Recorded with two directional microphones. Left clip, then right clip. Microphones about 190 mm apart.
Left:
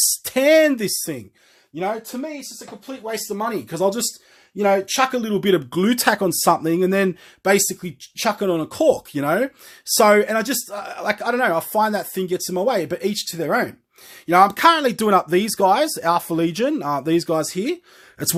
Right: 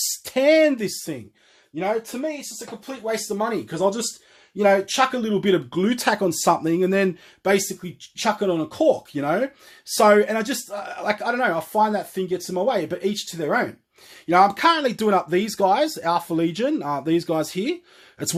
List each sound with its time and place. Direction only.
0.0 s speech: 25° left (ahead or behind)
2.8 s speech: 15° left (ahead or behind); by 4.0 s 40° left (ahead or behind)
4.5 s speech: 25° left (ahead or behind)
14.3 s speech: 25° left (ahead or behind)